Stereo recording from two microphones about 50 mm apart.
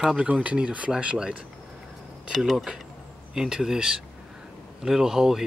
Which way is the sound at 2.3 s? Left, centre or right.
Centre.